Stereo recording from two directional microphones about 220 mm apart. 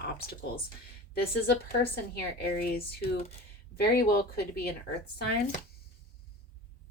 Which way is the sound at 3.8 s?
45° left (ahead or behind).